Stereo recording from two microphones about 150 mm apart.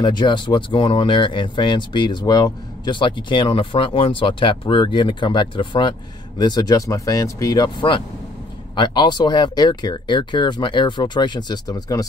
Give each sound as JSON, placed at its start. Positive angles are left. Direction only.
{"t": 0.0, "sound": "speech", "side_deg": 30}